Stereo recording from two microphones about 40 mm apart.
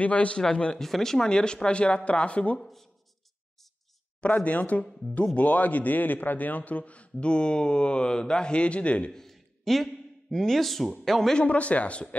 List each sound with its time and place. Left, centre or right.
0.0 s a man's voice: left
0.7 s speech: centre; by 2.6 s left
2.6 s speech: centre
4.5 s a man's voice: left
9.1 s a sound: centre
10.4 s speech: centre
11.3 s a man's voice: left